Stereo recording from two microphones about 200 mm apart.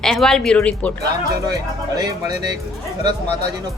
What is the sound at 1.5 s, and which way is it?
Speech, 20° right (ahead or behind).